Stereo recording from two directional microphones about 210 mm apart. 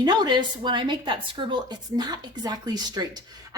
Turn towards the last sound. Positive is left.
turn(degrees=-20)  # may be behind; listen again after turning